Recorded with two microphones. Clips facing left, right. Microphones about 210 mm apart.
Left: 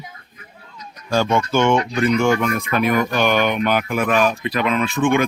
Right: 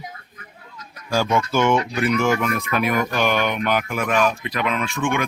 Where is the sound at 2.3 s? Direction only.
30° left (ahead or behind).